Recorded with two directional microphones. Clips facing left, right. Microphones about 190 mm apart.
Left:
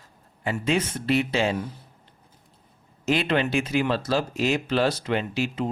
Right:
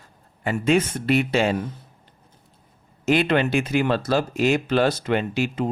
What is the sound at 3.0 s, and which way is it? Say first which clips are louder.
Speech: right 4 dB; 55° right (ahead or behind).